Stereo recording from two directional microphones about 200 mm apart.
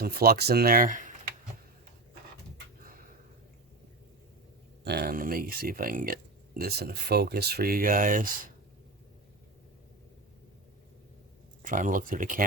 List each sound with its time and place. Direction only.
0.0 s speech: 50° right (ahead or behind)
4.8 s speech: 55° right (ahead or behind)
11.6 s speech: 40° right (ahead or behind)